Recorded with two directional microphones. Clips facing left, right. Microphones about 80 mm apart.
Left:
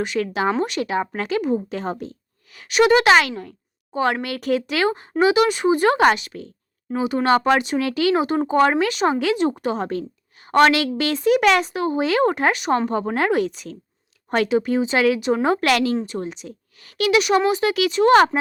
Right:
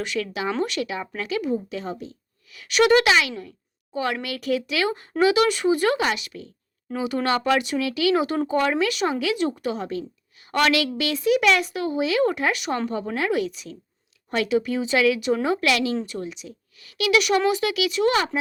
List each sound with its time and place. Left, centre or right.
0.0 s speech: left
0.9 s a woman's voice: left
2.6 s speech: left
3.1 s a woman's voice: left
5.2 s speech: left
6.0 s a woman's voice: left
6.9 s a woman's voice: left
15.4 s a woman's voice: left
17.1 s a woman's voice: left